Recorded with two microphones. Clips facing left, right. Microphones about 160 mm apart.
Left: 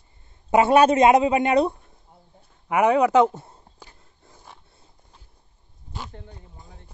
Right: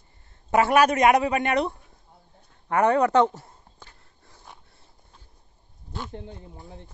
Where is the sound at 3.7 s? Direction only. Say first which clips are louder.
Left 2 dB; 20° left (ahead or behind).